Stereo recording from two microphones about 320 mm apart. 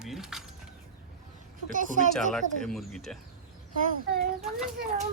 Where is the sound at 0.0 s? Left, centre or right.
Centre.